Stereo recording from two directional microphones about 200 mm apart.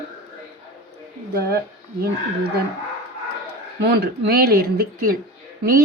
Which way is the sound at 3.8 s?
55° right (ahead or behind).